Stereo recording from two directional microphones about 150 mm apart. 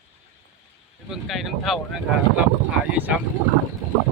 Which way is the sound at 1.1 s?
Centre (ahead or behind).